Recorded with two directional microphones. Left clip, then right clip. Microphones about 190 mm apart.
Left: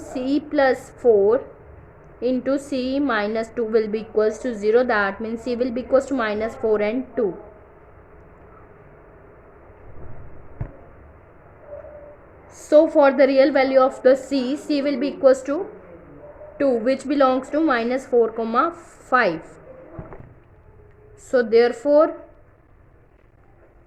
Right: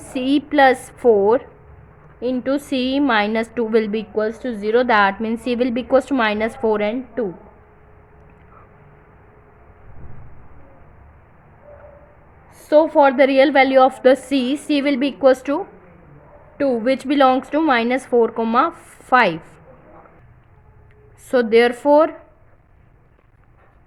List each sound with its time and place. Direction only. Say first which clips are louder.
0.0 s a woman's voice: right 4 dB; 35° right (ahead or behind)
2.1 s a woman's voice: right 1 dB; 20° right (ahead or behind)
2.6 s a woman's voice: right 3 dB; 35° right (ahead or behind)
4.1 s a woman's voice: left 1 dB; 15° right (ahead or behind)
12.5 s a woman's voice: right 1 dB; 15° right (ahead or behind)
13.2 s a woman's voice: right 3 dB; 35° right (ahead or behind)
16.6 s a woman's voice: right 1 dB; 25° right (ahead or behind)
21.2 s a woman's voice: right 2 dB; 35° right (ahead or behind)